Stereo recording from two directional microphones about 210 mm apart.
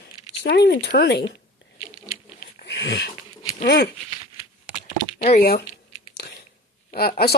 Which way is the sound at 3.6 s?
50° left (ahead or behind).